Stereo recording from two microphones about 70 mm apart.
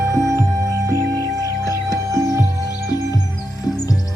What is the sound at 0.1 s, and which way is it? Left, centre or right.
Music, right.